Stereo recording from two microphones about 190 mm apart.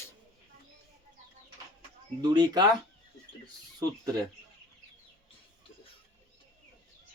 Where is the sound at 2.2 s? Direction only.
20° right (ahead or behind).